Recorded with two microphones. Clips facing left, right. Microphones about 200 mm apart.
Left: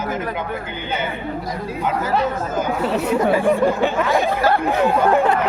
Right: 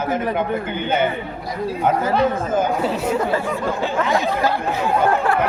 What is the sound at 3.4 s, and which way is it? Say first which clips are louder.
Speech: left 6 dB; 60° left (ahead or behind).